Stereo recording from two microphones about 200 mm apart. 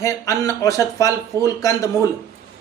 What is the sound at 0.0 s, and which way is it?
Speech, 15° left (ahead or behind).